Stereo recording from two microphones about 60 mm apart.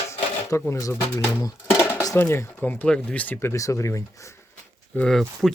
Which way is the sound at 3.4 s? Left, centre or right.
Left.